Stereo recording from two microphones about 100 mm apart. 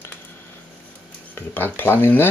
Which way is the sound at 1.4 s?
20° left (ahead or behind).